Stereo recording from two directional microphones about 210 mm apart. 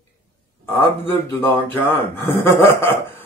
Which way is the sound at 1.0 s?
10° left (ahead or behind).